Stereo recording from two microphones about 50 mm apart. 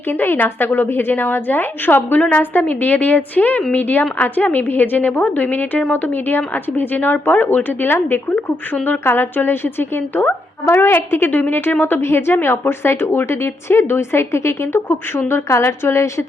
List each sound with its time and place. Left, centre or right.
0.1 s a woman's voice: left
11.9 s a woman's voice: left